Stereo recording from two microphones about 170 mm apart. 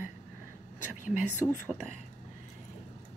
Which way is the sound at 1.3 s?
10° right (ahead or behind).